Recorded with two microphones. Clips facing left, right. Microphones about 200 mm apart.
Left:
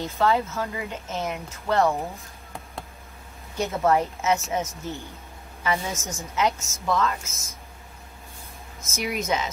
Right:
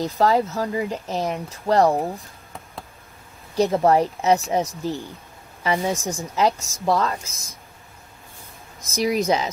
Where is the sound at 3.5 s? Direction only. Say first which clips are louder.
Right 5 dB; 35° right (ahead or behind).